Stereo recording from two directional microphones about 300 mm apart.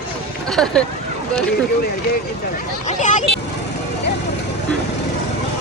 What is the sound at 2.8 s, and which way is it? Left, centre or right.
Speech, left.